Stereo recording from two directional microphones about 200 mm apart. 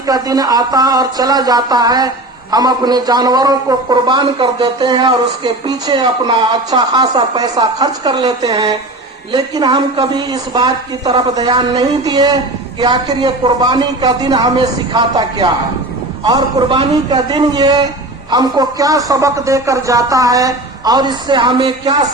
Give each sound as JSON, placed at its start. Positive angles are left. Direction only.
{"t": 0.1, "sound": "a man's voice", "side_deg": -20}